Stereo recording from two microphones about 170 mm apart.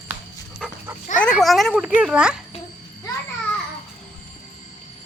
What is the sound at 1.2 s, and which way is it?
Speech, 5° left (ahead or behind).